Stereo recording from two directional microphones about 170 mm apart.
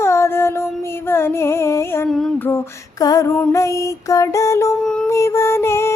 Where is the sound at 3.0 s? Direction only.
20° left (ahead or behind).